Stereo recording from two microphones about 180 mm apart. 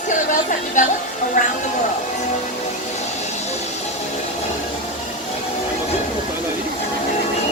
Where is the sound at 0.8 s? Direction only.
45° left (ahead or behind).